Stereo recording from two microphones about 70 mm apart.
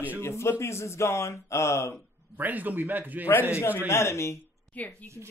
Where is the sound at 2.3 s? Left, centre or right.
Right.